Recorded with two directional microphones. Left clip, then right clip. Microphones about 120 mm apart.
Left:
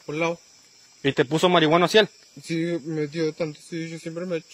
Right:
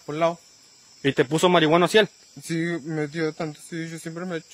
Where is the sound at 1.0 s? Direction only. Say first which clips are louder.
Even; 35° right (ahead or behind).